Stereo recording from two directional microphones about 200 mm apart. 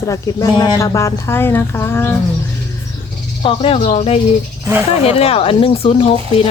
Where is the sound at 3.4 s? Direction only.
30° left (ahead or behind).